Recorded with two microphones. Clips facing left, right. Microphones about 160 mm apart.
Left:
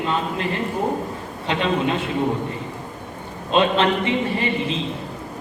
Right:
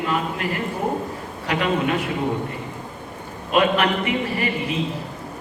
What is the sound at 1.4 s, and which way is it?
Speech, 25° left (ahead or behind).